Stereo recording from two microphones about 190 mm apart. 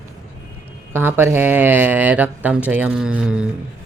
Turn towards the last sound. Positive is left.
turn(degrees=-5)  # may be behind; listen again after turning